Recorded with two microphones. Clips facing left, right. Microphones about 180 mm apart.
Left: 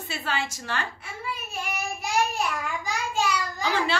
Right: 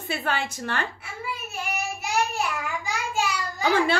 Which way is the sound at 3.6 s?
55° right (ahead or behind).